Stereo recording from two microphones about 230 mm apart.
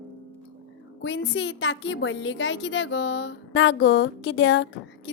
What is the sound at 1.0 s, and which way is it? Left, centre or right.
A woman's voice, left.